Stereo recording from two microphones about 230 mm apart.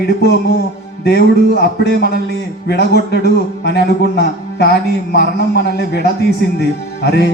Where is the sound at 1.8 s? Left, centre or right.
Left.